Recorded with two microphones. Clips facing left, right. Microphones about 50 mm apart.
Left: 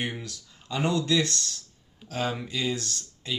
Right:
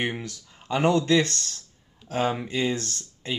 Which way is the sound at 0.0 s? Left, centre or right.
Right.